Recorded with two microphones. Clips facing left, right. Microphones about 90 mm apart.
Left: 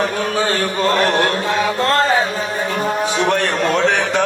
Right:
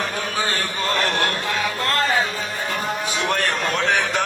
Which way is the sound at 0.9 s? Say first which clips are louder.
Left 4 dB; 20° left (ahead or behind).